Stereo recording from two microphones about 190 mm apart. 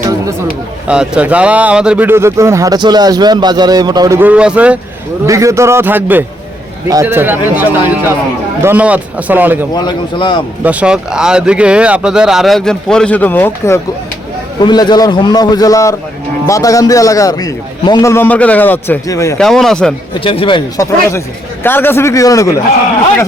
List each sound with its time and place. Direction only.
0.0 s chatter: 15° right (ahead or behind)
0.9 s a man's voice: 5° right (ahead or behind)
9.7 s a man's voice: 25° left (ahead or behind)
10.6 s speech: 5° right (ahead or behind); by 13.7 s 10° left (ahead or behind)
14.6 s a man's voice: 20° left (ahead or behind)
19.4 s speech: centre (ahead or behind)
20.1 s a man's voice: 30° left (ahead or behind)
20.8 s a man's voice: 15° left (ahead or behind)